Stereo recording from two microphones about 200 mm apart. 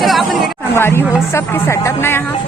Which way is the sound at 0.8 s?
10° left (ahead or behind).